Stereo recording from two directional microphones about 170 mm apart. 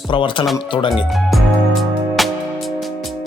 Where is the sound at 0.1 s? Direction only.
30° left (ahead or behind).